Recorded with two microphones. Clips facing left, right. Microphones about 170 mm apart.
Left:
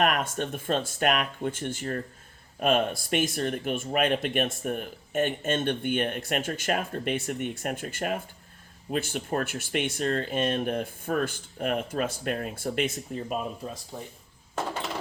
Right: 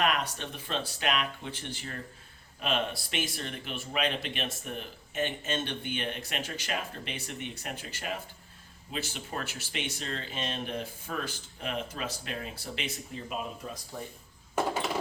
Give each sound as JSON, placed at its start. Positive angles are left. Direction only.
{"t": 0.0, "sound": "speech", "side_deg": 50}
{"t": 13.6, "sound": "speech", "side_deg": 30}